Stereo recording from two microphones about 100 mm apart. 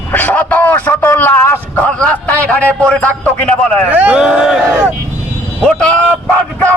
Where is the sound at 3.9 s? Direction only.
15° right (ahead or behind).